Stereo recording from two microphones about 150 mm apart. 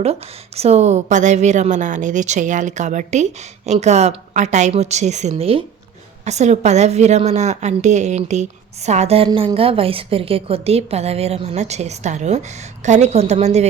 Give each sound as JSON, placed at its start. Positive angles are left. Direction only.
{"t": 0.0, "sound": "a woman's voice", "side_deg": -45}
{"t": 5.3, "sound": "speech", "side_deg": -40}
{"t": 6.2, "sound": "a woman's voice", "side_deg": -50}